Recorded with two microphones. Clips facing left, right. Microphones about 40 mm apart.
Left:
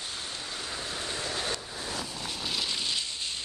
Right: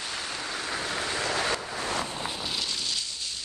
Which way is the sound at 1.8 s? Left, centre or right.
Right.